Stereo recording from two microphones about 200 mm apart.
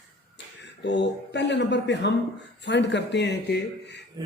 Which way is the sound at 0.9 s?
60° left (ahead or behind).